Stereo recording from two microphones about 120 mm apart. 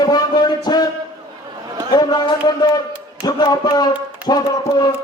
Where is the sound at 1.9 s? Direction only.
35° left (ahead or behind).